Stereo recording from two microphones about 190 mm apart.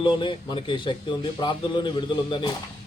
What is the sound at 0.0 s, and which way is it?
A man's voice, 25° left (ahead or behind).